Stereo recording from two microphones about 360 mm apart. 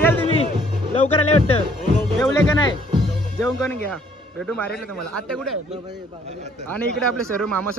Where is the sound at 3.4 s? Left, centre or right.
Centre.